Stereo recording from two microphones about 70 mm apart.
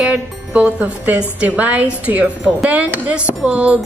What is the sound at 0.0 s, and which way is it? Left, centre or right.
A woman's voice, centre.